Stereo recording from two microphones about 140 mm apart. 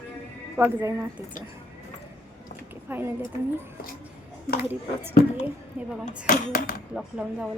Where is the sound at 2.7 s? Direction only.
15° right (ahead or behind).